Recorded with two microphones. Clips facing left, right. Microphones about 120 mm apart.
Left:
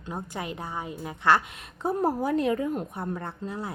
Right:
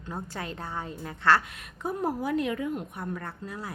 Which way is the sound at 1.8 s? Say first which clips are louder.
Left 4 dB; 35° left (ahead or behind).